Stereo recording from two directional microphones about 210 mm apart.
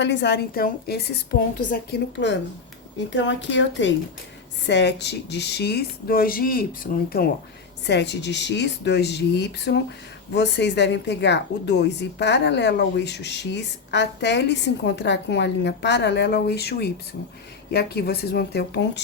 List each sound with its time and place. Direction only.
0.0 s a woman's voice: 55° left (ahead or behind)